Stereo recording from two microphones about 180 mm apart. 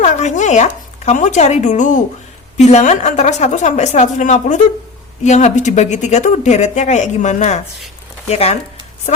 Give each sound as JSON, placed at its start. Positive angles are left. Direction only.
{"t": 0.0, "sound": "speech", "side_deg": 40}